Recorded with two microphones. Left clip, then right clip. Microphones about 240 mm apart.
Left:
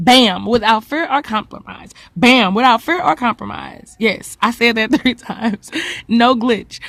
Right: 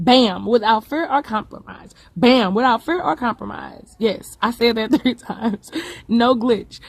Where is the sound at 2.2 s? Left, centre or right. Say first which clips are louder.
Left 4 dB; left.